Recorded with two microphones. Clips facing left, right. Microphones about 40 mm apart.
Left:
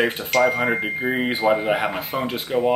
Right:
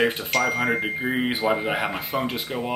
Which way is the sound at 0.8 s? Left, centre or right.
Centre.